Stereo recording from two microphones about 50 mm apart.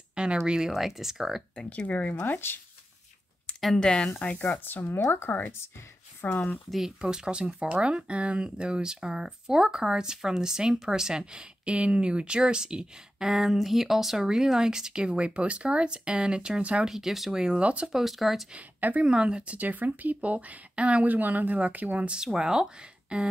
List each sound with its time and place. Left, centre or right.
0.1 s a sound: centre
0.5 s speech: centre
1.9 s speech: left
3.8 s speech: centre
4.4 s speech: left
6.2 s speech: left
7.0 s speech: centre
16.8 s speech: centre
17.6 s speech: right
17.9 s speech: centre
18.5 s speech: right
19.0 s a woman's voice: centre
22.1 s speech: centre